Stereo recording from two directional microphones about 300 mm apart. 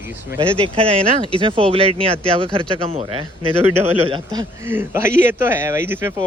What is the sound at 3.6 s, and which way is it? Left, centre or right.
Speech, centre.